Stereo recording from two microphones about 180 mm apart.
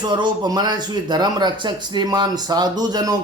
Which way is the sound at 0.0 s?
25° right (ahead or behind).